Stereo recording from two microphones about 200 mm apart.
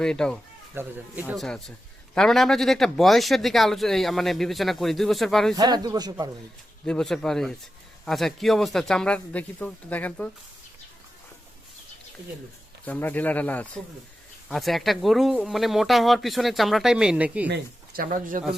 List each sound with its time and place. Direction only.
0.0 s speech: 5° left (ahead or behind)
0.7 s speech: 10° right (ahead or behind)
1.3 s speech: centre (ahead or behind)
5.5 s speech: 20° right (ahead or behind)
6.8 s speech: 5° left (ahead or behind)
12.8 s speech: 10° left (ahead or behind); by 17.5 s 5° right (ahead or behind)
17.5 s speech: 45° right (ahead or behind)